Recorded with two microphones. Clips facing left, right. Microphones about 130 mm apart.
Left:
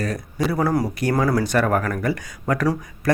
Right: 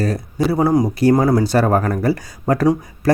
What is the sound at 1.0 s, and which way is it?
Speech, 30° right (ahead or behind).